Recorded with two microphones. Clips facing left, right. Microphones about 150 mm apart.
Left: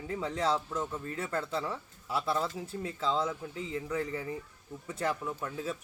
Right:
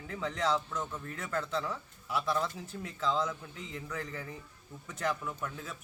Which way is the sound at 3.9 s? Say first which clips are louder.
Left 6 dB; 15° left (ahead or behind).